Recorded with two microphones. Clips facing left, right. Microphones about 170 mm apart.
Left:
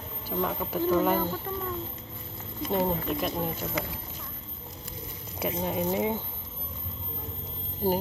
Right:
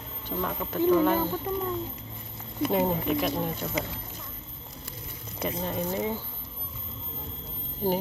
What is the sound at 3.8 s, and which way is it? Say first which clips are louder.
Speech: right 2 dB; 20° right (ahead or behind).